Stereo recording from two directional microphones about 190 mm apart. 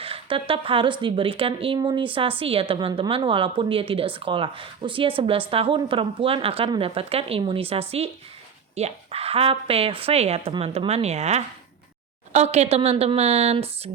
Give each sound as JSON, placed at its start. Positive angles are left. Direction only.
{"t": 0.0, "sound": "a woman's voice", "side_deg": -30}